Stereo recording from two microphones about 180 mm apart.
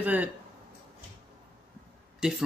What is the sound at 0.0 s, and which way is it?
Speech, 10° right (ahead or behind).